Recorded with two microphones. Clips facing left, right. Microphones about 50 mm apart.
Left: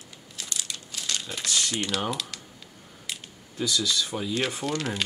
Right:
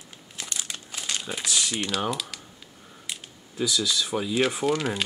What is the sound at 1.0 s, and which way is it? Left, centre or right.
Speech, centre.